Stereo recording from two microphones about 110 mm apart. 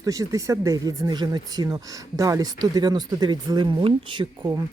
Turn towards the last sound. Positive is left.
turn(degrees=-40)  # may be behind; listen again after turning